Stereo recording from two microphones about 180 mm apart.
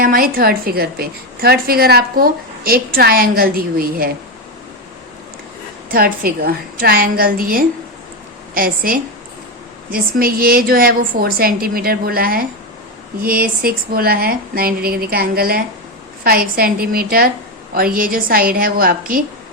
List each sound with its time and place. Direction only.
0.0 s a woman's voice: 55° right (ahead or behind)
5.9 s a woman's voice: 55° right (ahead or behind)
13.6 s a woman's voice: 55° right (ahead or behind)